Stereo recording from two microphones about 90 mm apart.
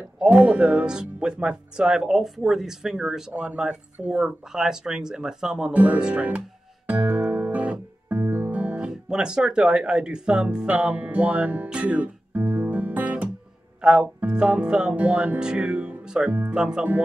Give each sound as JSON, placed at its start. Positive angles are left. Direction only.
{"t": 0.2, "sound": "speech", "side_deg": -10}
{"t": 6.9, "sound": "music", "side_deg": -20}
{"t": 13.7, "sound": "speech", "side_deg": -10}